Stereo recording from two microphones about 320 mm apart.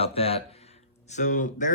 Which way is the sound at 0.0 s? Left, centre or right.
Centre.